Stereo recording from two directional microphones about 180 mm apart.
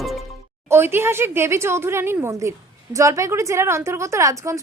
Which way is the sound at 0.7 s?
15° right (ahead or behind).